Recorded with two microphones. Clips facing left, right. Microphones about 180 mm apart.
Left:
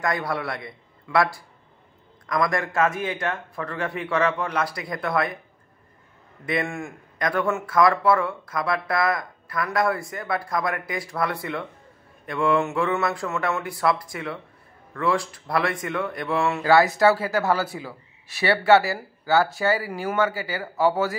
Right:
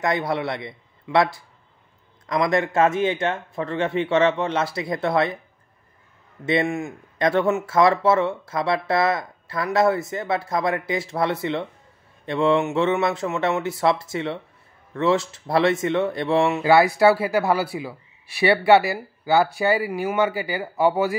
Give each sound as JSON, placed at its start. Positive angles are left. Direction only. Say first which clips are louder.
{"t": 0.0, "sound": "speech", "louder": "right 3 dB", "side_deg": -25}
{"t": 6.4, "sound": "speech", "louder": "right 5 dB", "side_deg": -25}